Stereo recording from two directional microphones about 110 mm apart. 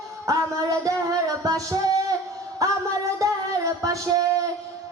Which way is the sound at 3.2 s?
30° right (ahead or behind).